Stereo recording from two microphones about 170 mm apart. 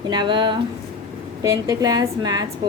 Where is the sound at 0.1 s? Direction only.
25° right (ahead or behind).